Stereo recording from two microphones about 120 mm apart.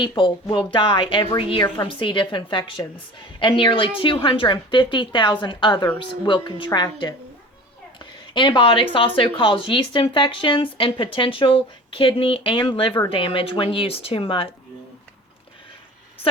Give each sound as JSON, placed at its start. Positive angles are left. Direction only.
{"t": 0.2, "sound": "speech", "side_deg": 40}